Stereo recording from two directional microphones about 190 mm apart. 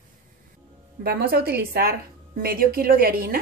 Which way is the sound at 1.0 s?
55° right (ahead or behind).